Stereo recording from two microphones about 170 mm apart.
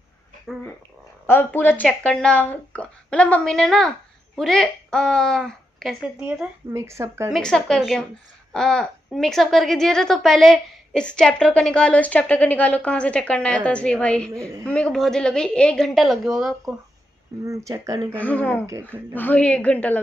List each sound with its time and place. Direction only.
1.2 s a woman's voice: 10° left (ahead or behind); by 6.5 s 5° right (ahead or behind)
6.7 s speech: 15° right (ahead or behind)
7.3 s a woman's voice: 5° left (ahead or behind)
17.5 s speech: 20° right (ahead or behind)
18.1 s speech: 10° left (ahead or behind)